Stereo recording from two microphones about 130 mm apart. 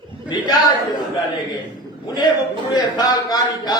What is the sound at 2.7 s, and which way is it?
A man's voice, 30° left (ahead or behind).